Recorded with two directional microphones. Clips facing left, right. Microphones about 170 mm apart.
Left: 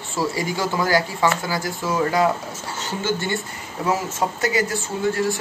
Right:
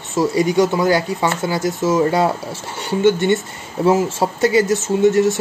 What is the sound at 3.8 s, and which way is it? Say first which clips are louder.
Speech: right 7 dB; 25° right (ahead or behind).